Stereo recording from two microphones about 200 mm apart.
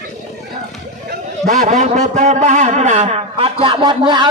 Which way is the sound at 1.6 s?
35° right (ahead or behind).